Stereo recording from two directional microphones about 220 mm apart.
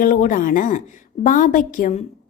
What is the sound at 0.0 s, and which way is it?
A woman's voice, 40° left (ahead or behind).